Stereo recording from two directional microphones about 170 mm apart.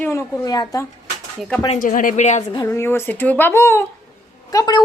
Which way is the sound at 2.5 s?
15° left (ahead or behind).